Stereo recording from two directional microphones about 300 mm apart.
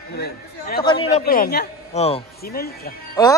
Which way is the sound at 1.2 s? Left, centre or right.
Left.